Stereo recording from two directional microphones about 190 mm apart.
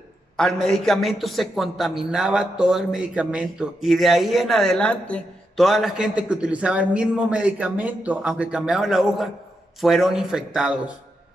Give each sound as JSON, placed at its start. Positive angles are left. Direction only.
{"t": 0.4, "sound": "speech", "side_deg": 5}